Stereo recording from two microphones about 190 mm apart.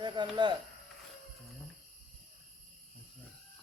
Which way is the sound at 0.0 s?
25° right (ahead or behind).